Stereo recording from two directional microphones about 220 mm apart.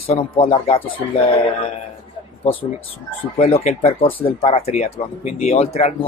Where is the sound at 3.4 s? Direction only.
25° left (ahead or behind).